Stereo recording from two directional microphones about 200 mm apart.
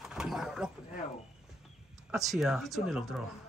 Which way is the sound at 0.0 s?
Centre (ahead or behind).